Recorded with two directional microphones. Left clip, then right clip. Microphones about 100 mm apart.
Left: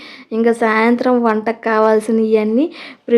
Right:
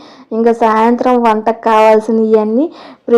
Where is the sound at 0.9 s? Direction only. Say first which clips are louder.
Right 4 dB; 5° right (ahead or behind).